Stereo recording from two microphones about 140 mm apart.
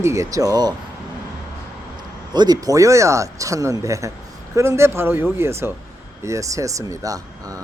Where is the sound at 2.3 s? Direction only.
30° right (ahead or behind).